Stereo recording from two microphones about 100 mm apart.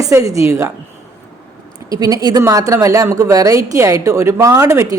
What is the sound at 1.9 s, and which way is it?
Speech, 35° right (ahead or behind).